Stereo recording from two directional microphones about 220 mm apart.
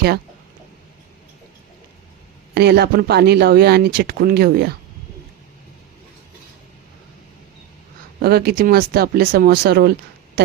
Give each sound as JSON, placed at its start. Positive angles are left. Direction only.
{"t": 2.6, "sound": "speech", "side_deg": -45}
{"t": 8.2, "sound": "speech", "side_deg": -45}